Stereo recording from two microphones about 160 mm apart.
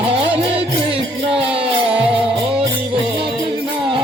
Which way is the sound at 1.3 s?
35° right (ahead or behind).